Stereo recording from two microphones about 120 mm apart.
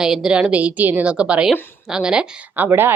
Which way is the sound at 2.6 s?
20° right (ahead or behind).